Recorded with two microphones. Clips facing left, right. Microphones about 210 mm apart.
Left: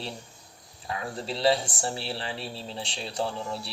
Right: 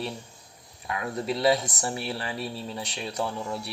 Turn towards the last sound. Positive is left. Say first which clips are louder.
# right 1 dB
turn(degrees=30)  # may be behind; listen again after turning